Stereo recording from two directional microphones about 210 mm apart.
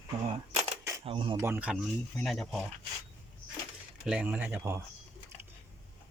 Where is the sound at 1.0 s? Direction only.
25° right (ahead or behind).